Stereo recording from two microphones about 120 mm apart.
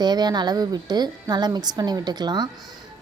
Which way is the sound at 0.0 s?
35° right (ahead or behind).